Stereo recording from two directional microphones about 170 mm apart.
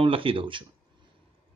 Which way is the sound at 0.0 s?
30° right (ahead or behind).